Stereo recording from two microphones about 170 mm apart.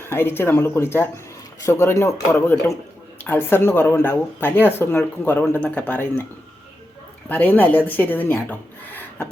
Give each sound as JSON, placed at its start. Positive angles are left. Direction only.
{"t": 0.0, "sound": "speech", "side_deg": 15}
{"t": 7.3, "sound": "speech", "side_deg": 10}